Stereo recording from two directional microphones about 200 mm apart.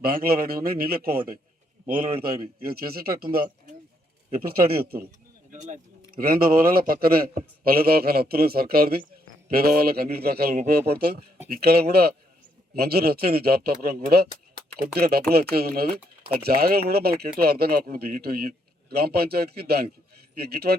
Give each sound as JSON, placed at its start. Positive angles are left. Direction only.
{"t": 0.0, "sound": "speech", "side_deg": -50}